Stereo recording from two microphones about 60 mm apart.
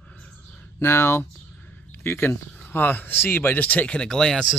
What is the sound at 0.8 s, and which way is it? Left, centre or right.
Speech, left.